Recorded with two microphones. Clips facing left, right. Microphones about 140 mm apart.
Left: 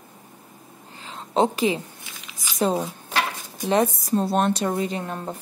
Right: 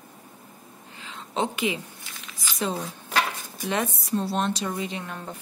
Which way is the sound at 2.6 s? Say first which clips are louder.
Left 7 dB; 40° left (ahead or behind).